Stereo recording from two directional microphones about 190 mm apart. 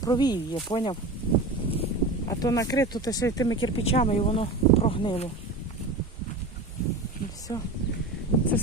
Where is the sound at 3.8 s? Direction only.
35° left (ahead or behind).